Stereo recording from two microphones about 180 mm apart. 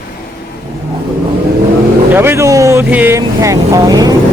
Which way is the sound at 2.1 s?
15° right (ahead or behind).